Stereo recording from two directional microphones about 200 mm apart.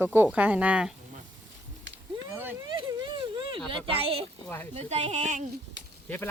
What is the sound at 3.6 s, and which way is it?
Speech, 25° right (ahead or behind).